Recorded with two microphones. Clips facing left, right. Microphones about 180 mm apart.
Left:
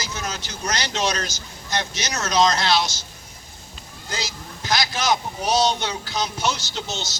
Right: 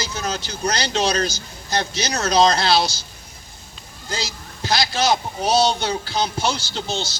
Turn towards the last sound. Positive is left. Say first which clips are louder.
# right 4 dB
turn(degrees=-30)  # may be behind; listen again after turning